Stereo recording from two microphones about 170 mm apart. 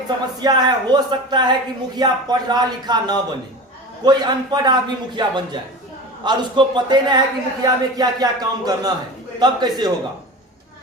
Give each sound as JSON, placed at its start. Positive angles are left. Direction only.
{"t": 0.3, "sound": "speech", "side_deg": -25}